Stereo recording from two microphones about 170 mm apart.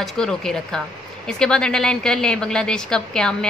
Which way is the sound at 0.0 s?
5° left (ahead or behind).